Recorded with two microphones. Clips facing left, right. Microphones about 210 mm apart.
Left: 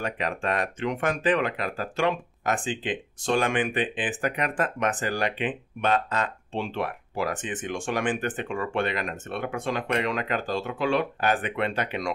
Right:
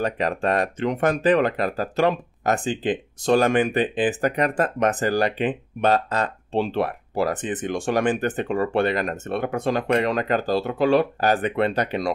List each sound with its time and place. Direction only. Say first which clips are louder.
0.0 s speech: right 6 dB; 35° right (ahead or behind)